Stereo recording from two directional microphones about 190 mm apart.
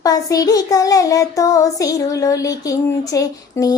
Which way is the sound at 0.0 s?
20° left (ahead or behind).